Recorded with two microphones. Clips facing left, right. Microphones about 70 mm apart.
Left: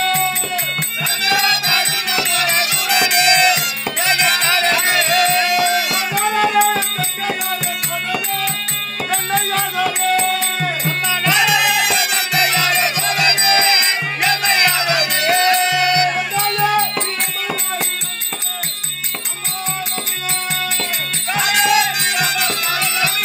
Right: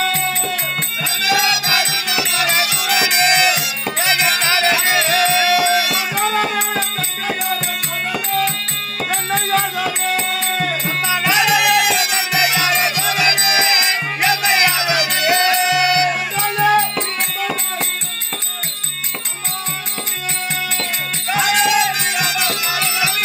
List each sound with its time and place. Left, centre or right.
1.2 s music: centre
9.1 s music: centre
21.3 s music: centre